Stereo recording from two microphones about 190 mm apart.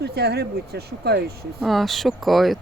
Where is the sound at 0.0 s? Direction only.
60° right (ahead or behind).